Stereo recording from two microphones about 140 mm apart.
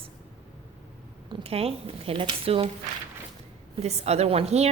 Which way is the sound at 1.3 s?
45° right (ahead or behind).